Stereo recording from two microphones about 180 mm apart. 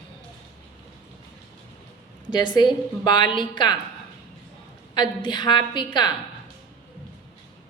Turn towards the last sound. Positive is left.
turn(degrees=25)  # may be behind; listen again after turning